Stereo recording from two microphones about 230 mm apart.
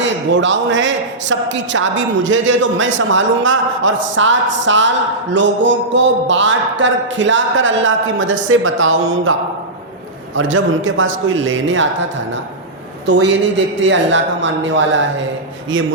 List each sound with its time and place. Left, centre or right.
0.0 s a woman's voice: right
10.3 s a man's voice: right
13.1 s a woman's voice: right